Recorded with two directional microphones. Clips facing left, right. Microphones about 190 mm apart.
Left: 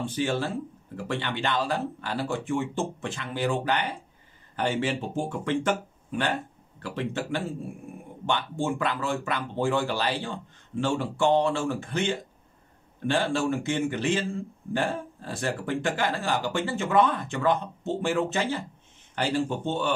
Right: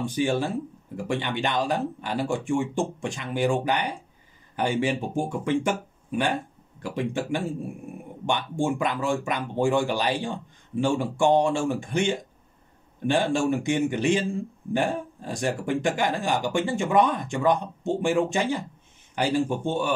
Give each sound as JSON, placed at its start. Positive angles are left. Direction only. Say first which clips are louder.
{"t": 0.0, "sound": "speech", "louder": "right 3 dB", "side_deg": -10}